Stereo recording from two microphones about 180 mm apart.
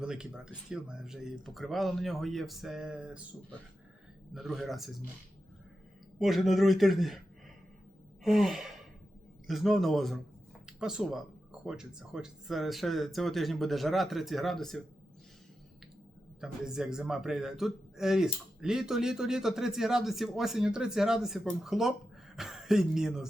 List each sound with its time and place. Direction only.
0.0 s a man's voice: 5° right (ahead or behind)
4.4 s a man's voice: centre (ahead or behind)
6.1 s a man's voice: centre (ahead or behind)
8.2 s a man's voice: centre (ahead or behind)
16.4 s a man's voice: 5° right (ahead or behind)